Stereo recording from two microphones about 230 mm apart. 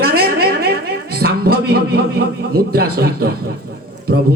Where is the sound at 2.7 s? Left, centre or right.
Right.